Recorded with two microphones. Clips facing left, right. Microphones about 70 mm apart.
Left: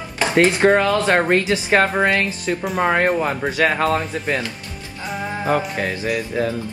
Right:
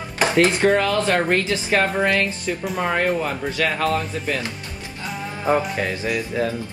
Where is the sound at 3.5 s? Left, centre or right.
Centre.